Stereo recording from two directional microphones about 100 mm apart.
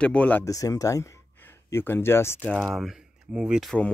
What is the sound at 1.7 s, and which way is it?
Speech, 25° left (ahead or behind).